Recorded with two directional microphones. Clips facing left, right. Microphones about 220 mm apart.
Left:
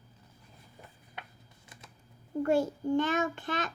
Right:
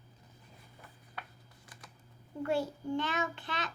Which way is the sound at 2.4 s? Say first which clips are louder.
Left 5 dB; 45° left (ahead or behind).